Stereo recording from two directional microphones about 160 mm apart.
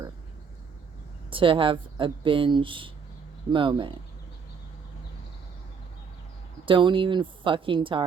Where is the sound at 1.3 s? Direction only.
35° right (ahead or behind).